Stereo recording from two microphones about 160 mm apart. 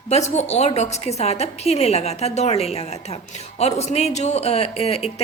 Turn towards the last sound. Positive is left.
turn(degrees=40)  # may be behind; listen again after turning